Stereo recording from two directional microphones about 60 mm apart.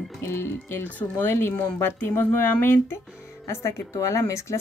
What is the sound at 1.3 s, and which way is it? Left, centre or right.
Speech, left.